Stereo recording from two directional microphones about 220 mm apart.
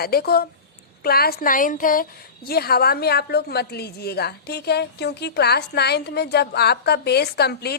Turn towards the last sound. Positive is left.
turn(degrees=45)  # may be behind; listen again after turning